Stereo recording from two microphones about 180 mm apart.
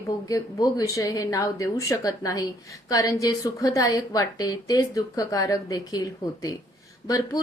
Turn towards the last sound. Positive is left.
turn(degrees=20)  # may be behind; listen again after turning